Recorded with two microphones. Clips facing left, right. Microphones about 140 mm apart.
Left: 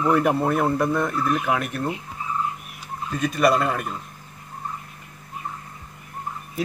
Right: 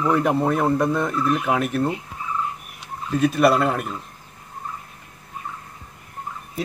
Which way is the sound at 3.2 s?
5° right (ahead or behind).